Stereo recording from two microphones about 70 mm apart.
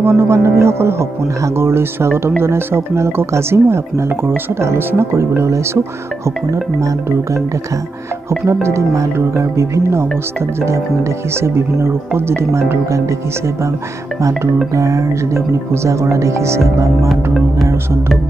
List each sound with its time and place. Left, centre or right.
0.0 s speech: right
8.6 s speech: right
11.3 s speech: right
14.7 s speech: right
17.1 s music: centre